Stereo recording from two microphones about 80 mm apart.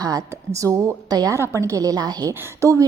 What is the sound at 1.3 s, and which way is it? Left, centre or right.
A woman's voice, right.